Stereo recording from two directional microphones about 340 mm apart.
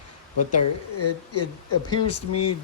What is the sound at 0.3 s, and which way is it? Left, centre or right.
Speech, left.